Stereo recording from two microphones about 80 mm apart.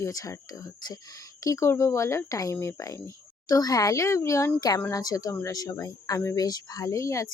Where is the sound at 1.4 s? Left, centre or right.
Left.